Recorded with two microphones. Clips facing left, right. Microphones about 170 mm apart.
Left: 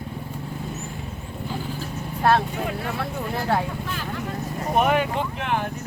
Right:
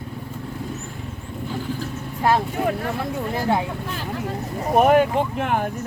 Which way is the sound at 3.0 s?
15° right (ahead or behind).